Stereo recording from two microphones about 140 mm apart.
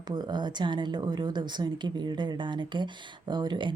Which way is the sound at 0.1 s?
30° right (ahead or behind).